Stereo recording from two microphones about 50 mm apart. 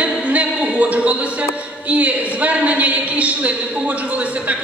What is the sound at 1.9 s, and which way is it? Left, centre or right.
A man's voice, right.